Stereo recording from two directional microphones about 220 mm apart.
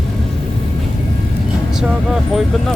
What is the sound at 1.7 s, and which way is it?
Speech, centre (ahead or behind).